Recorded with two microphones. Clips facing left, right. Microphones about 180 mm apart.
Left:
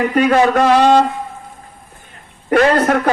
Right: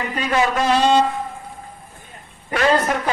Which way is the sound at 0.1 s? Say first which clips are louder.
Left 5 dB; 55° left (ahead or behind).